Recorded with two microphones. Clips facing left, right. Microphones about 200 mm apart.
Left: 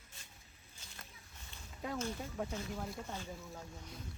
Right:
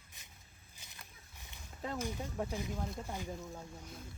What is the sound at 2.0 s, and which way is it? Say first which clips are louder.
Speech: right 2 dB; 15° right (ahead or behind).